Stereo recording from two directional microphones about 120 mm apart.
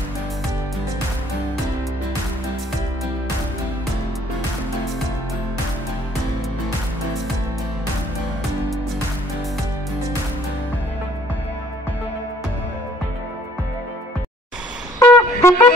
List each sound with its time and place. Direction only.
15.0 s wind instrument: 20° left (ahead or behind)